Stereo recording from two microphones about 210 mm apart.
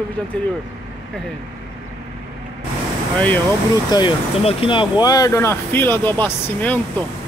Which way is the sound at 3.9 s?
25° left (ahead or behind).